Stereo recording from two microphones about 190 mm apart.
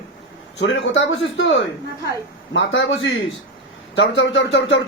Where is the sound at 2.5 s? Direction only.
75° left (ahead or behind).